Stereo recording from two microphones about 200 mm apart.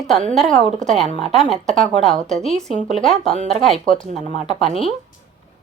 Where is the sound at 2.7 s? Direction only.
35° right (ahead or behind).